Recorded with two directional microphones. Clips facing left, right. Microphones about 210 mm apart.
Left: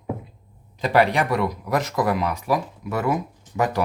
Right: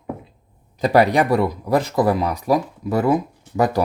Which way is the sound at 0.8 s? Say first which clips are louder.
Right 4 dB; 40° right (ahead or behind).